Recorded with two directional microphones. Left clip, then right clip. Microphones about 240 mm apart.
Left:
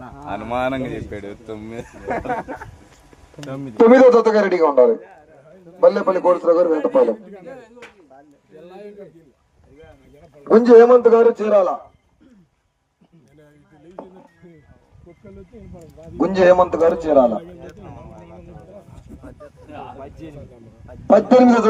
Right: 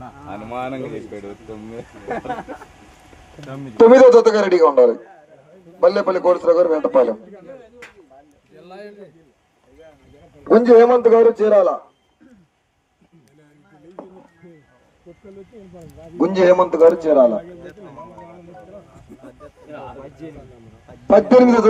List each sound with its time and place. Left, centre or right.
0.3 s speech: left
2.3 s speech: left
3.8 s a man's voice: right
7.4 s speech: left
8.6 s a sound: right
10.5 s a man's voice: centre
16.1 s a man's voice: centre
21.1 s a man's voice: centre